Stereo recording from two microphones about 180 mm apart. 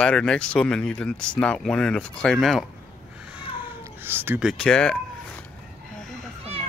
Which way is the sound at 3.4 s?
10° right (ahead or behind).